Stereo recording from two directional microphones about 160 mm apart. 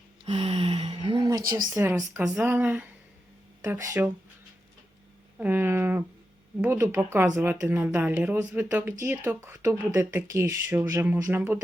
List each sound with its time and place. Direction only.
0.3 s a sound: 30° right (ahead or behind)
1.7 s a woman's voice: 20° right (ahead or behind)
3.8 s speech: 20° right (ahead or behind)
5.4 s speech: 10° right (ahead or behind)